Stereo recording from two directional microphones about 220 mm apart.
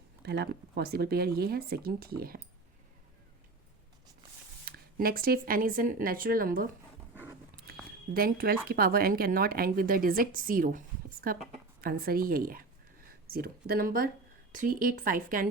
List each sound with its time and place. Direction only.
0.3 s speech: 45° right (ahead or behind)
4.6 s a woman's voice: 40° right (ahead or behind)
8.1 s a woman's voice: 40° right (ahead or behind)